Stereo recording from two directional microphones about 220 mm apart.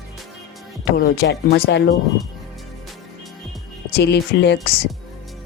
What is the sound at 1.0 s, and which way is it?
Speech, 45° left (ahead or behind).